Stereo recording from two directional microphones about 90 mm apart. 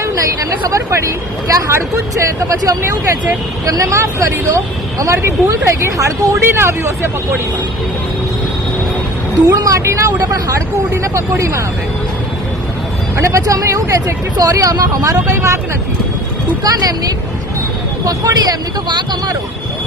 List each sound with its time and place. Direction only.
0.5 s speech: 30° right (ahead or behind)
9.6 s speech: 40° right (ahead or behind)
13.1 s speech: 35° right (ahead or behind)
16.6 s speech: 45° right (ahead or behind)
18.9 s speech: 55° right (ahead or behind)